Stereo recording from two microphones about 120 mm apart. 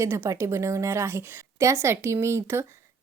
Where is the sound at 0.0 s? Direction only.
25° right (ahead or behind).